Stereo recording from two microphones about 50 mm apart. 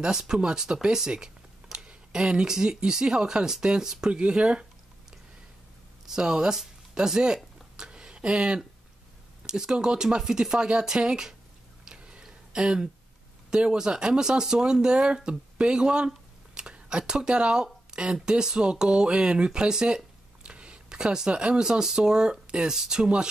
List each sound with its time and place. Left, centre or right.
0.0 s speech: centre
6.0 s speech: centre
7.7 s a sound: centre
9.5 s speech: centre
11.8 s a sound: centre
13.5 s speech: centre